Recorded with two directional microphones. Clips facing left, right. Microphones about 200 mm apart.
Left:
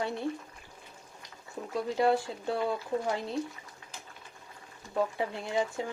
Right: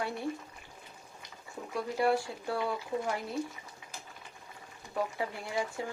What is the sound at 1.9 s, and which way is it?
Speech, 20° left (ahead or behind).